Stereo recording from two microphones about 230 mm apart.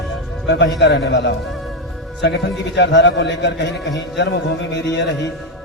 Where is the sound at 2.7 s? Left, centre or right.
Left.